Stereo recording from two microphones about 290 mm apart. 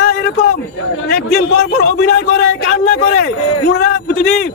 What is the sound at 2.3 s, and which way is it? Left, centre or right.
A man's voice, left.